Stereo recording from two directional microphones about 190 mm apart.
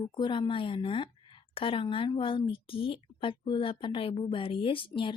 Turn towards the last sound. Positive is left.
turn(degrees=25)  # may be behind; listen again after turning